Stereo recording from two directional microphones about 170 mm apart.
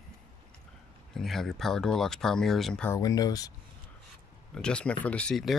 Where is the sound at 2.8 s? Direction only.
20° left (ahead or behind).